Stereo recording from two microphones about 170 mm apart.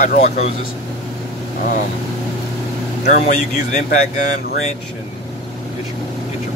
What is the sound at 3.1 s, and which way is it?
Speech, 45° left (ahead or behind).